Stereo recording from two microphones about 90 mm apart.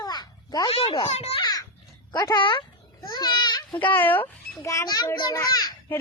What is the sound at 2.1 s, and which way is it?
Speech, 50° left (ahead or behind).